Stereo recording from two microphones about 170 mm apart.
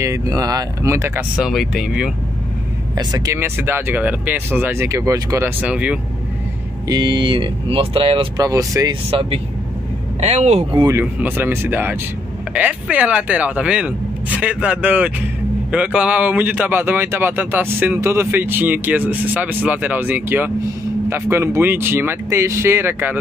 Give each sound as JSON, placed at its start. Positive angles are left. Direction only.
{"t": 0.0, "sound": "speech", "side_deg": -20}
{"t": 3.0, "sound": "speech", "side_deg": -20}
{"t": 5.6, "sound": "speech", "side_deg": -5}
{"t": 6.9, "sound": "speech", "side_deg": -25}
{"t": 8.5, "sound": "speech", "side_deg": -20}
{"t": 10.2, "sound": "speech", "side_deg": -40}
{"t": 10.8, "sound": "speech", "side_deg": -15}